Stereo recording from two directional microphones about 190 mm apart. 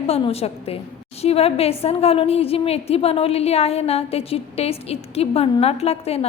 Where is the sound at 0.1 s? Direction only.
30° left (ahead or behind).